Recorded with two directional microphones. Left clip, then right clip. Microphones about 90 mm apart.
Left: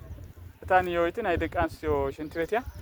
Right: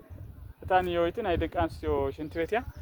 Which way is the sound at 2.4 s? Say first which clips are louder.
Left 1 dB; 35° right (ahead or behind).